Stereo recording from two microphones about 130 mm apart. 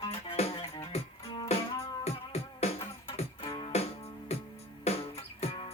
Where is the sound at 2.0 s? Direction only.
55° left (ahead or behind).